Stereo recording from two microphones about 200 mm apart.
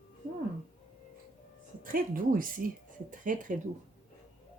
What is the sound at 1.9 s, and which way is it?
A woman's voice, 45° right (ahead or behind).